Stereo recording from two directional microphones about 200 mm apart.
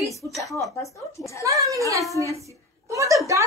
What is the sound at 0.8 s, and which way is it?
Speech, 15° left (ahead or behind).